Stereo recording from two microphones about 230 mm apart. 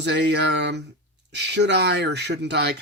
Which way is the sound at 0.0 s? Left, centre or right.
Right.